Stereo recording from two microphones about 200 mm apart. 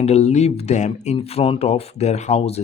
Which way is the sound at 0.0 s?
35° left (ahead or behind).